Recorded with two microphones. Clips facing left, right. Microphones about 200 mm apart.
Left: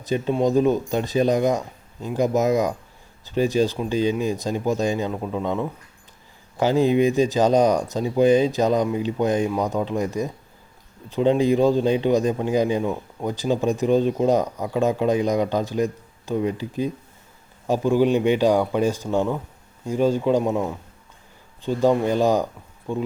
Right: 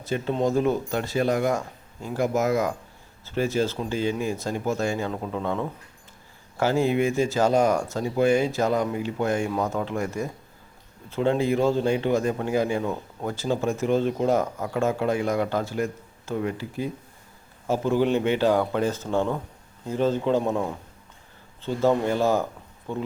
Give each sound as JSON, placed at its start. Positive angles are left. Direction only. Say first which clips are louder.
{"t": 0.0, "sound": "a man's voice", "louder": "left 3 dB", "side_deg": 15}